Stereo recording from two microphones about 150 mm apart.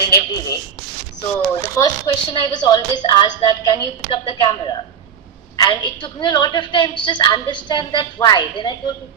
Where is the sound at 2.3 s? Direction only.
30° left (ahead or behind).